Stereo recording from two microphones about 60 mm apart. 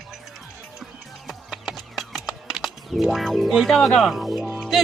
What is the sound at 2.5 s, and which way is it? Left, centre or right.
Speech, centre.